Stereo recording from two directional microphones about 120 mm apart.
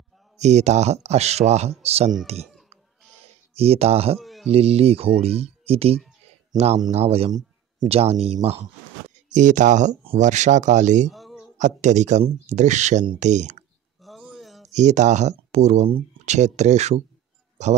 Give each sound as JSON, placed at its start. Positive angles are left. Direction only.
{"t": 0.4, "sound": "speech", "side_deg": -70}
{"t": 2.4, "sound": "baby cry", "side_deg": 0}
{"t": 3.5, "sound": "speech", "side_deg": -55}
{"t": 4.2, "sound": "a sound", "side_deg": 0}
{"t": 4.5, "sound": "speech", "side_deg": -55}
{"t": 9.3, "sound": "speech", "side_deg": -90}
{"t": 11.1, "sound": "a sound", "side_deg": 0}
{"t": 11.5, "sound": "speech", "side_deg": -80}
{"t": 14.0, "sound": "a sound", "side_deg": -5}
{"t": 14.7, "sound": "speech", "side_deg": -75}